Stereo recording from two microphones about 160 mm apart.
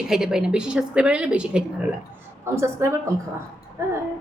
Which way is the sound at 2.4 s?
15° right (ahead or behind).